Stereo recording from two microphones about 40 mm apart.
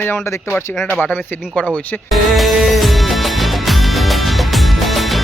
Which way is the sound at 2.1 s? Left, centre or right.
Centre.